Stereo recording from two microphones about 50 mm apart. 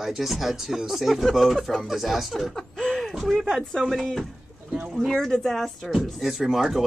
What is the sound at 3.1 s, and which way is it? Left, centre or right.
Speech, centre.